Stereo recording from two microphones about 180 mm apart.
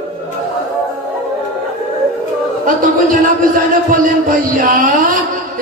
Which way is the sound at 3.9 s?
50° right (ahead or behind).